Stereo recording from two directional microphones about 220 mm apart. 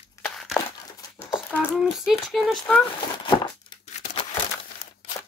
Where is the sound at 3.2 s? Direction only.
20° left (ahead or behind).